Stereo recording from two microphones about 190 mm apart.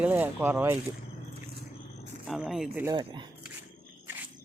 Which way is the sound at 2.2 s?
Centre (ahead or behind).